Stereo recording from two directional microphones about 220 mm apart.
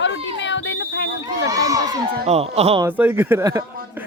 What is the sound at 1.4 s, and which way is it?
Crowd, 15° right (ahead or behind).